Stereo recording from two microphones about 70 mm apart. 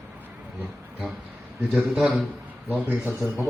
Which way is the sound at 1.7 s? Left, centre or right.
Centre.